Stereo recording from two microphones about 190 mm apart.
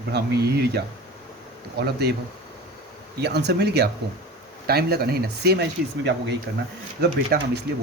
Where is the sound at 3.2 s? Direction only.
60° right (ahead or behind).